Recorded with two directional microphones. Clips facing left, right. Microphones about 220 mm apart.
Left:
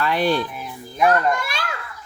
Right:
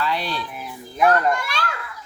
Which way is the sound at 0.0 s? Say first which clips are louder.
Left 6 dB; 50° left (ahead or behind).